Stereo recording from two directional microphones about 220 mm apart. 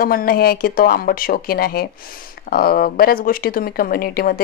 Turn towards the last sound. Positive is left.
turn(degrees=45)  # may be behind; listen again after turning